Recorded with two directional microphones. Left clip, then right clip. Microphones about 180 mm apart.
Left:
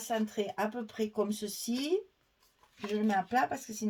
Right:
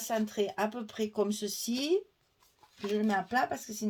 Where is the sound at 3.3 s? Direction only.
40° right (ahead or behind).